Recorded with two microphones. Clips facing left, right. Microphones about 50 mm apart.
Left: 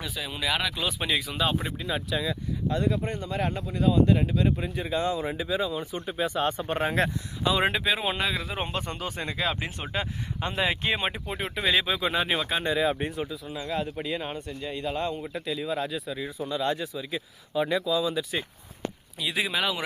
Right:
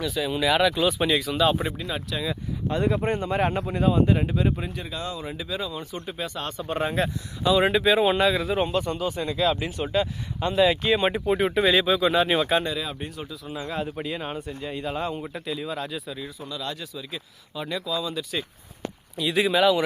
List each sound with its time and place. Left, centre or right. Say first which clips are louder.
0.2 s speech: right 7 dB; centre
2.7 s speech: right 5 dB; right
4.0 s speech: right 1 dB; centre
4.9 s speech: left 5 dB; left
7.0 s speech: left 1 dB; left
7.4 s speech: right 4 dB; left
7.7 s speech: right 7 dB; centre
8.6 s speech: right 7 dB; left
11.1 s speech: right 10 dB; centre
12.3 s speech: right 5 dB; centre
12.6 s speech: left 5 dB; left
13.7 s speech: even; centre
16.1 s speech: left 4 dB; centre
19.2 s speech: right 7 dB; centre